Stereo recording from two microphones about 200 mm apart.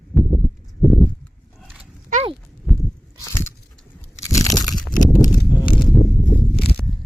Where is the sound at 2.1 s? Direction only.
30° right (ahead or behind).